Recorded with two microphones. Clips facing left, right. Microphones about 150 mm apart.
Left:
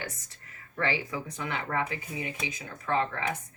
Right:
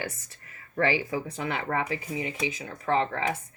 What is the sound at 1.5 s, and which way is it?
Speech, 20° right (ahead or behind).